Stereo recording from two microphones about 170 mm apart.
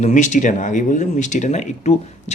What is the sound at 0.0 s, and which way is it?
Speech, 45° left (ahead or behind).